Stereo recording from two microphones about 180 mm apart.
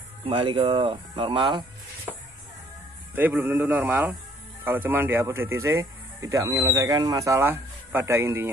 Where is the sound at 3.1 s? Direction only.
10° right (ahead or behind).